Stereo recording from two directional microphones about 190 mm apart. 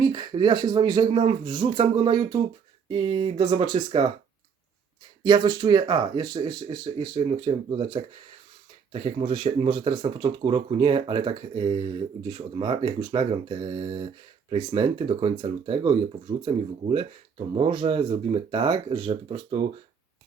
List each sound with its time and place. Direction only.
0.0 s speech: 20° right (ahead or behind)
5.2 s speech: 20° right (ahead or behind)